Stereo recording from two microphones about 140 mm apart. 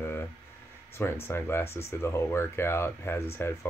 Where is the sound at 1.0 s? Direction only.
15° left (ahead or behind).